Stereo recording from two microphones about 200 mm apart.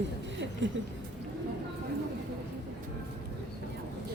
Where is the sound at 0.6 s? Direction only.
70° right (ahead or behind).